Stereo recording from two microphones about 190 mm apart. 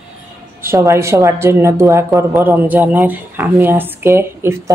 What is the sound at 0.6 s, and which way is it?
Speech, 15° right (ahead or behind).